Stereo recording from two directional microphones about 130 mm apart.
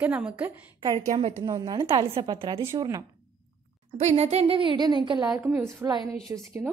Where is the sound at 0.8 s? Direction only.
30° right (ahead or behind).